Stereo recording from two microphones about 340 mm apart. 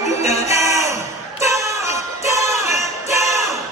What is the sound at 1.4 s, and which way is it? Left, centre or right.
Music, centre.